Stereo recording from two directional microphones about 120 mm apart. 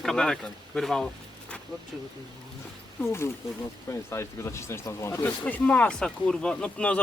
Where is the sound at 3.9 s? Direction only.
25° left (ahead or behind).